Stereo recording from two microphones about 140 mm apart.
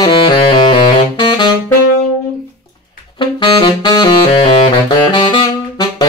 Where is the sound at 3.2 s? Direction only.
35° left (ahead or behind).